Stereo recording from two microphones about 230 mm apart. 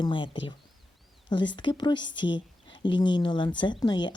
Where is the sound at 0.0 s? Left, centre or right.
Left.